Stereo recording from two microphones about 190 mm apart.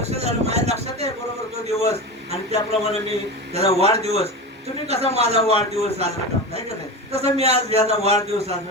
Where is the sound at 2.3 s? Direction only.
35° right (ahead or behind).